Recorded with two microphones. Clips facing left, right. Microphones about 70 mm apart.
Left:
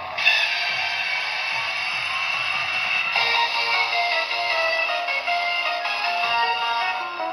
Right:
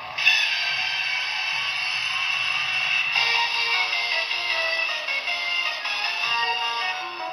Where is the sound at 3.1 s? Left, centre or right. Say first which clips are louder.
Left 4 dB; left.